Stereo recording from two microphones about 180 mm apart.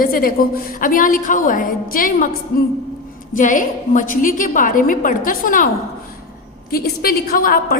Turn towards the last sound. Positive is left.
turn(degrees=55)  # may be behind; listen again after turning